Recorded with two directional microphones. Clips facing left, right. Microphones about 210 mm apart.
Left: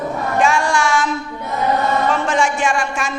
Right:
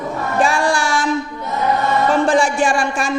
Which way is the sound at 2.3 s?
35° right (ahead or behind).